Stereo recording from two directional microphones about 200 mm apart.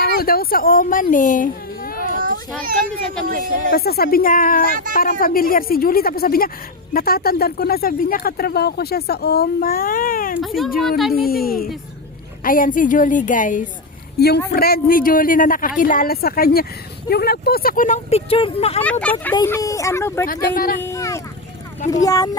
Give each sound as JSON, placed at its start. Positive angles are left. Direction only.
{"t": 0.2, "sound": "speech", "side_deg": 50}
{"t": 2.1, "sound": "children playing", "side_deg": -45}
{"t": 2.6, "sound": "a child's voice", "side_deg": -45}
{"t": 3.7, "sound": "speech", "side_deg": 50}
{"t": 4.6, "sound": "a child's voice", "side_deg": -45}
{"t": 5.2, "sound": "speech", "side_deg": 45}
{"t": 10.4, "sound": "speech", "side_deg": 0}
{"t": 11.3, "sound": "speech", "side_deg": 50}
{"t": 14.2, "sound": "speech", "side_deg": 50}
{"t": 18.8, "sound": "speech", "side_deg": 5}
{"t": 20.2, "sound": "speech", "side_deg": 45}
{"t": 20.8, "sound": "a sound", "side_deg": 15}
{"t": 21.8, "sound": "speech", "side_deg": 15}